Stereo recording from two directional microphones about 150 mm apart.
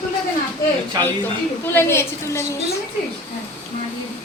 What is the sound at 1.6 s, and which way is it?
Speech, 15° left (ahead or behind).